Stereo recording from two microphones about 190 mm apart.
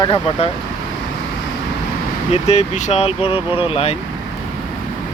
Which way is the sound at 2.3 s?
35° left (ahead or behind).